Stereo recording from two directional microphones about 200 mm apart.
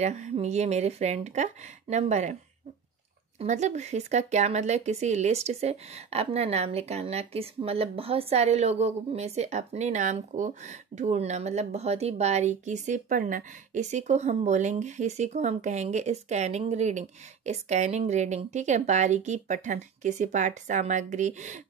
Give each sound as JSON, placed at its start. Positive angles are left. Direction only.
{"t": 0.0, "sound": "speech", "side_deg": -35}
{"t": 3.3, "sound": "speech", "side_deg": -35}